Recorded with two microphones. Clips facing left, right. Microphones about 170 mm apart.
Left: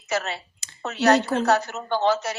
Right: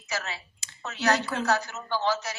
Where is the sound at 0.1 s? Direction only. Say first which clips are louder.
Left 7 dB; 55° left (ahead or behind).